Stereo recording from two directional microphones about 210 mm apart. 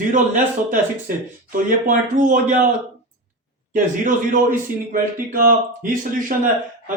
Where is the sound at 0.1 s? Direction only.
40° right (ahead or behind).